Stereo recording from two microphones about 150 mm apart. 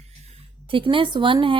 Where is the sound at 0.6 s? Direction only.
35° right (ahead or behind).